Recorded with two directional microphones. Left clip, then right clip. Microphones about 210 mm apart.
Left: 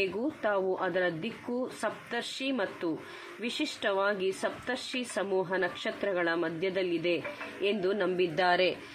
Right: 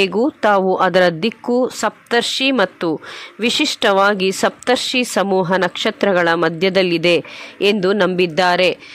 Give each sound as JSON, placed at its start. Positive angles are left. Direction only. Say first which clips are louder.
{"t": 0.0, "sound": "speech", "louder": "right 15 dB", "side_deg": -55}